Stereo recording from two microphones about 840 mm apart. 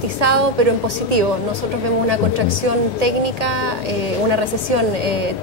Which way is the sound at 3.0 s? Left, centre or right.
Right.